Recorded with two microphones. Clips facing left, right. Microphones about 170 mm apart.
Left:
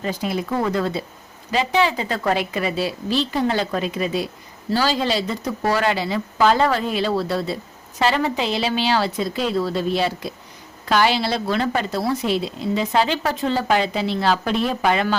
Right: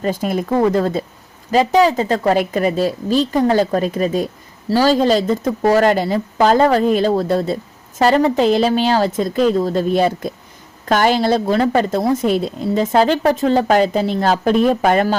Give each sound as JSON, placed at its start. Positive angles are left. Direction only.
{"t": 0.0, "sound": "a woman's voice", "side_deg": -50}